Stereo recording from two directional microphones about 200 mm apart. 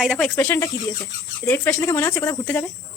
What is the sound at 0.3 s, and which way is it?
Speech, 10° left (ahead or behind).